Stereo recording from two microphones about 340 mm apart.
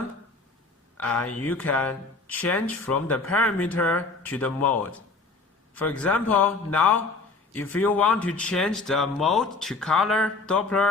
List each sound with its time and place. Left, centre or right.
0.9 s speech: centre